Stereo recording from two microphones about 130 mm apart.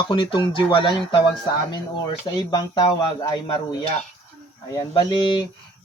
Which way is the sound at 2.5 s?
30° left (ahead or behind).